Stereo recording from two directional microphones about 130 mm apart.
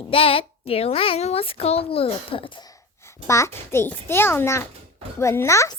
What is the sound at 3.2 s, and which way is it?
A child's voice, 20° left (ahead or behind).